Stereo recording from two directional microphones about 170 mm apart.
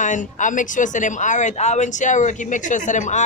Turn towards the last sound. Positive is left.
turn(degrees=45)  # may be behind; listen again after turning